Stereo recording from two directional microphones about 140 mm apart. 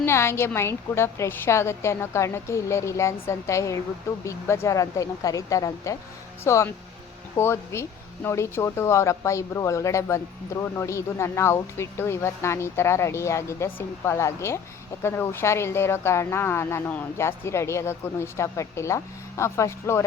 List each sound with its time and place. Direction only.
0.0 s speech: 20° left (ahead or behind)